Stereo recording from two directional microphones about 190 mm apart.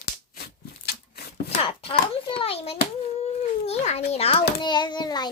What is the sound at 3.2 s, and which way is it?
A child's voice, 35° left (ahead or behind).